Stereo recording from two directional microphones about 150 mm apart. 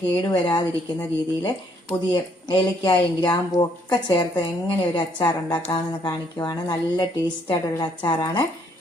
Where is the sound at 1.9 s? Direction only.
30° left (ahead or behind).